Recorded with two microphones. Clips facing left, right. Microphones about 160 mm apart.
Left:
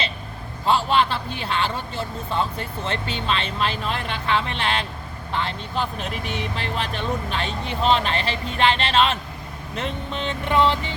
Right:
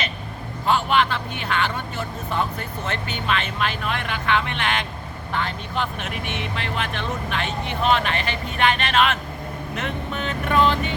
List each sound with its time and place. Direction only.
0.7 s speech: 30° left (ahead or behind)